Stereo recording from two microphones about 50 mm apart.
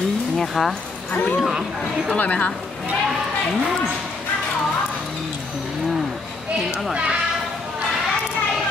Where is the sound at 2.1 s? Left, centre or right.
Left.